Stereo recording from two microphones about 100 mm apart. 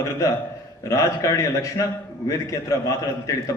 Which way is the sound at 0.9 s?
30° left (ahead or behind).